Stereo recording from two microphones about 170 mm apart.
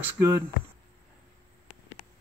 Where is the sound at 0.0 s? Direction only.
15° right (ahead or behind).